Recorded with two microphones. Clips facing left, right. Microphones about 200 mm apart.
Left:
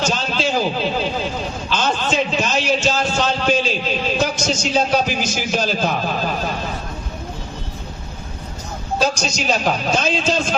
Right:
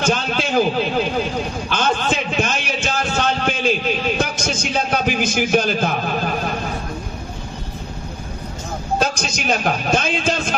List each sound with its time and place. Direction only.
0.0 s a man's voice: 55° right (ahead or behind)
1.7 s a sound: 55° right (ahead or behind)
9.0 s a man's voice: 55° right (ahead or behind)